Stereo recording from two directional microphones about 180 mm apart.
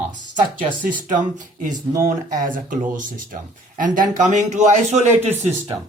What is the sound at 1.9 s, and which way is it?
Speech, 20° right (ahead or behind).